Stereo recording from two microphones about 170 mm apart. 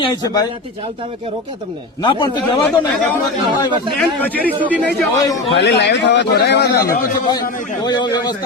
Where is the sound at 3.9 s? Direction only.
5° left (ahead or behind).